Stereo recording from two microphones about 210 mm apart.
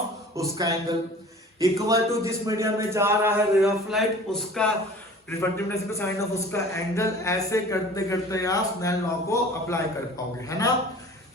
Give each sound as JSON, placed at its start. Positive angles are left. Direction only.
{"t": 0.3, "sound": "a man's voice", "side_deg": -15}